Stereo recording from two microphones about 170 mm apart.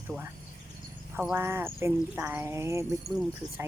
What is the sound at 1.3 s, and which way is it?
Speech, 15° right (ahead or behind).